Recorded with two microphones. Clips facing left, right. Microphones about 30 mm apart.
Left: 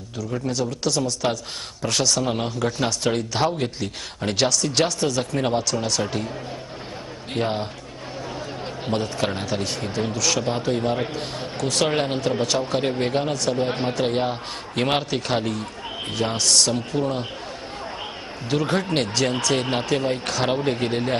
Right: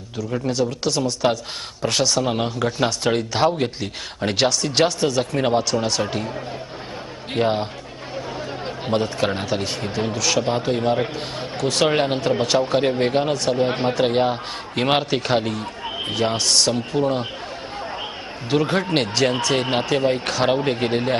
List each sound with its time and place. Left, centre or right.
0.3 s speech: centre
7.3 s speech: centre
18.5 s speech: centre